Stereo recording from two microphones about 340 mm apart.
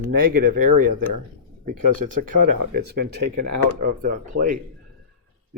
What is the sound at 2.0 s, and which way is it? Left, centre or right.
Speech, right.